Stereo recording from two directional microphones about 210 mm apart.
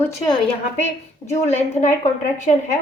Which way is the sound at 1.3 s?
35° left (ahead or behind).